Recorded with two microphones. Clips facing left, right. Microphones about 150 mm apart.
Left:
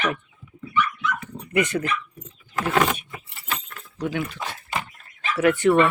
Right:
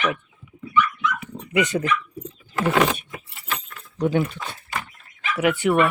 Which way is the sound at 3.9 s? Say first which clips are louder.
Right 6 dB; 35° right (ahead or behind).